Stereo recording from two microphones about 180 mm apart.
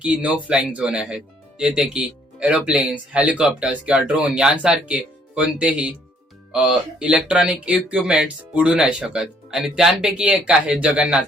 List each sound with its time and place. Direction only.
0.0 s speech: 5° right (ahead or behind)